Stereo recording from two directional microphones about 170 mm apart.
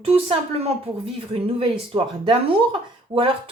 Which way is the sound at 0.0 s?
35° right (ahead or behind).